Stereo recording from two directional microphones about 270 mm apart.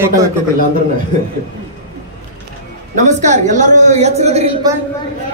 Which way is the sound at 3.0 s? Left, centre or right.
Right.